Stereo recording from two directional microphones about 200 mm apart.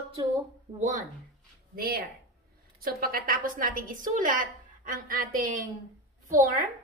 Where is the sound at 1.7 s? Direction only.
50° right (ahead or behind).